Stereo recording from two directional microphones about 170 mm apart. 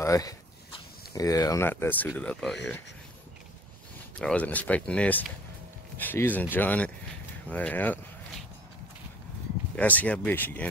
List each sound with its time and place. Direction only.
0.0 s speech: 20° left (ahead or behind)
4.2 s speech: 5° left (ahead or behind)
9.8 s speech: 10° left (ahead or behind)